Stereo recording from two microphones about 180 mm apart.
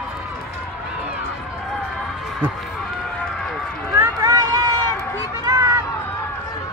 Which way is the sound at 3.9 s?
20° right (ahead or behind).